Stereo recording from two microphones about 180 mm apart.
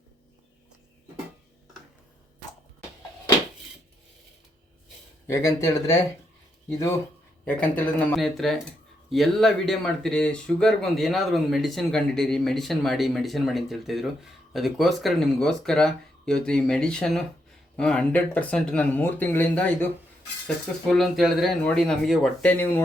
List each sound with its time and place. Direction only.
5.3 s speech: 15° left (ahead or behind)